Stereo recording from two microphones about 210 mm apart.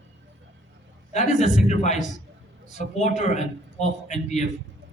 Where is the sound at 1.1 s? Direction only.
35° left (ahead or behind).